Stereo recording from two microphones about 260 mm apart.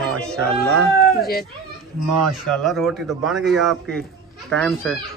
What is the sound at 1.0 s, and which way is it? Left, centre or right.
Speech, left.